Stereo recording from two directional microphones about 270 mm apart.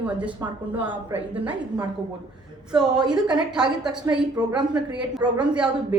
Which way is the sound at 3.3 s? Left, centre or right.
Centre.